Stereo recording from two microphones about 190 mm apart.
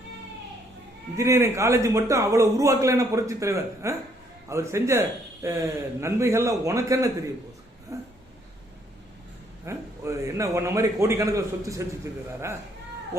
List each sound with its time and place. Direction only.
1.1 s a man's voice: 15° right (ahead or behind)
7.9 s a sound: 15° right (ahead or behind)
9.6 s a man's voice: 15° right (ahead or behind)